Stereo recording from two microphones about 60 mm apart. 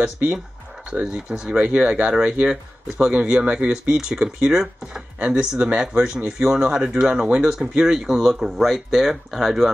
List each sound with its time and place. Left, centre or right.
1.0 s speech: centre
3.7 s speech: centre